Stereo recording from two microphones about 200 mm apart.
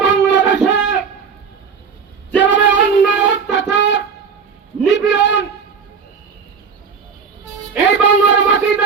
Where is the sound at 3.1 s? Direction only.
65° left (ahead or behind).